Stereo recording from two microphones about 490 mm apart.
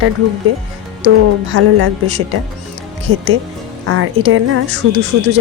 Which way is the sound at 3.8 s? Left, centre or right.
Right.